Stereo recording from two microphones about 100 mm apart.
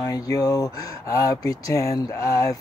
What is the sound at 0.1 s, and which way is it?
Speech, 35° left (ahead or behind).